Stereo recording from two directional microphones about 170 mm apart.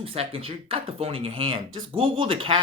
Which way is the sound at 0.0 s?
35° right (ahead or behind).